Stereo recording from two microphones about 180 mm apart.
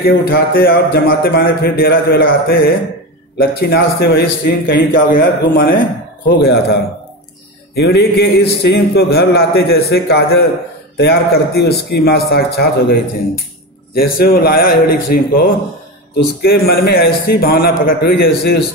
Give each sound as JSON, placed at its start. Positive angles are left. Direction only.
{"t": 0.0, "sound": "speech", "side_deg": 60}